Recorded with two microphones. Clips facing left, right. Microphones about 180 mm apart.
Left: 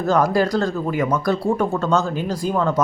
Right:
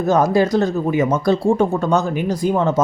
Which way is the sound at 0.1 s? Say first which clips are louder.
Right 2 dB; 20° right (ahead or behind).